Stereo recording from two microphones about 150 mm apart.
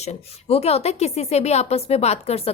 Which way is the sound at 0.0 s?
45° left (ahead or behind).